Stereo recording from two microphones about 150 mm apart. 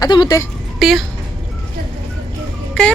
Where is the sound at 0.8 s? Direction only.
Centre (ahead or behind).